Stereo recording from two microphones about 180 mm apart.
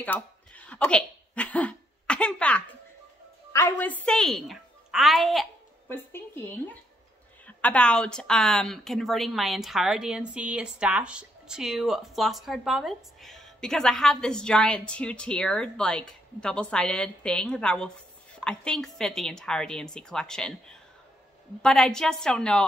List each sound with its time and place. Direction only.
0.0 s a sound: 10° left (ahead or behind)
3.5 s a woman's voice: 10° left (ahead or behind)
5.9 s speech: 10° left (ahead or behind)